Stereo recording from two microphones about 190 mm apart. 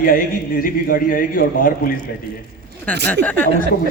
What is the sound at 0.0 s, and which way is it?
A man's voice, 50° left (ahead or behind).